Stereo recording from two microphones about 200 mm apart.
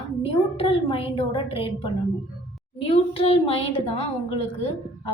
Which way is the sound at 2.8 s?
30° left (ahead or behind).